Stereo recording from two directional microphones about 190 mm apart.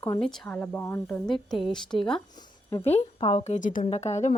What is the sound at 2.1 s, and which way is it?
Speech, 20° left (ahead or behind).